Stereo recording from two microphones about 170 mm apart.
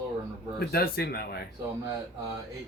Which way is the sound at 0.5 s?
65° left (ahead or behind).